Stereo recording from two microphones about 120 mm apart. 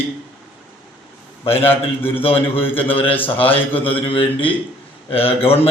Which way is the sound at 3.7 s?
50° left (ahead or behind).